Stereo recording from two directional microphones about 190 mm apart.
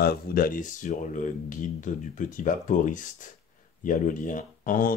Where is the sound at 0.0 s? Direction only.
50° left (ahead or behind).